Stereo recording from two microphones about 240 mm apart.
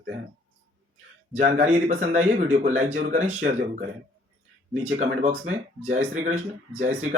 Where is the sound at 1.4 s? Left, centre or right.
Right.